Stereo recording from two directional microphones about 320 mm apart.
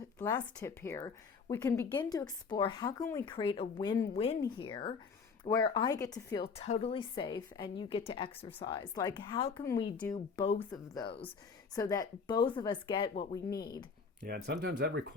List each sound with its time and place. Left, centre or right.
0.2 s speech: centre
14.3 s speech: right